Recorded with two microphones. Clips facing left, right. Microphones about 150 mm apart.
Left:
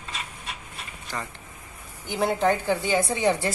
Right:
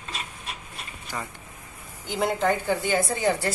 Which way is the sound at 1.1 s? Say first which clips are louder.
Even; 5° right (ahead or behind).